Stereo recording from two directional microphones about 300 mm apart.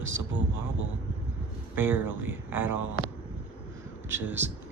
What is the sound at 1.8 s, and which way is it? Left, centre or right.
Speech, centre.